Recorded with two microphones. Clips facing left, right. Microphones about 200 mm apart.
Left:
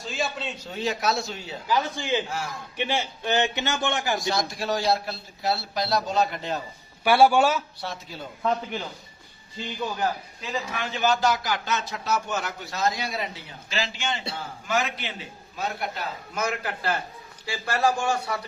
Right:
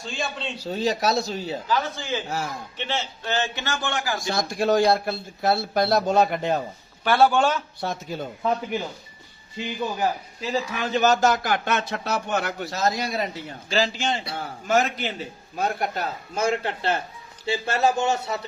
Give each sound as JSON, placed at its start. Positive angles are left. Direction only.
{"t": 0.0, "sound": "a man's voice", "side_deg": 5}
{"t": 0.5, "sound": "speech", "side_deg": -35}
{"t": 1.6, "sound": "a man's voice", "side_deg": 15}
{"t": 4.3, "sound": "speech", "side_deg": -50}
{"t": 7.0, "sound": "a man's voice", "side_deg": 10}
{"t": 7.8, "sound": "speech", "side_deg": -50}
{"t": 8.4, "sound": "speech", "side_deg": -10}
{"t": 10.5, "sound": "speech", "side_deg": -35}
{"t": 12.7, "sound": "speech", "side_deg": -40}
{"t": 16.3, "sound": "speech", "side_deg": -30}